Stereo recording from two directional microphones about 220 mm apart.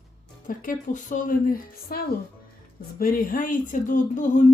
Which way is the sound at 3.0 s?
40° left (ahead or behind).